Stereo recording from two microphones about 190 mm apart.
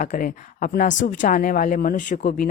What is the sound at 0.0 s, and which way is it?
Speech, 45° left (ahead or behind).